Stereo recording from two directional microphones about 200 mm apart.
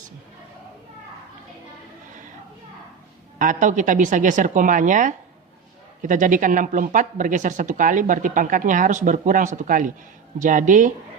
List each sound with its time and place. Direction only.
3.3 s speech: 40° right (ahead or behind)